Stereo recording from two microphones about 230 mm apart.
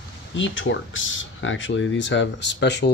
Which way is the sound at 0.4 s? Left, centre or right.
Left.